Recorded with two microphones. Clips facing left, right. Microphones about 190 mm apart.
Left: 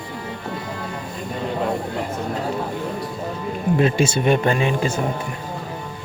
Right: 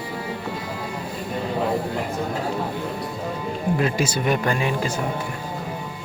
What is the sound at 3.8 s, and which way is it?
Speech, 25° left (ahead or behind).